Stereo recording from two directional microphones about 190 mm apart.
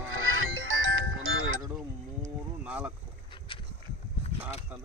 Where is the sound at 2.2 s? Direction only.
10° right (ahead or behind).